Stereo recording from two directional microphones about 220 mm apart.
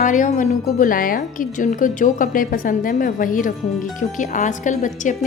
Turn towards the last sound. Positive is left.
turn(degrees=35)  # may be behind; listen again after turning